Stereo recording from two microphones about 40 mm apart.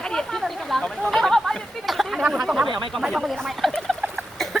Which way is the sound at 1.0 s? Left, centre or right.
Centre.